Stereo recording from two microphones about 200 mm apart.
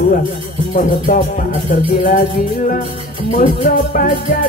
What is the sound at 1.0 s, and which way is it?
Music, 40° left (ahead or behind).